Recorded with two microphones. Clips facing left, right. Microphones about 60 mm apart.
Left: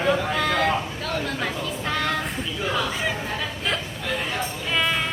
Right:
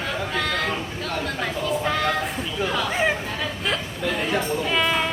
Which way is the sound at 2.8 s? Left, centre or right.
Right.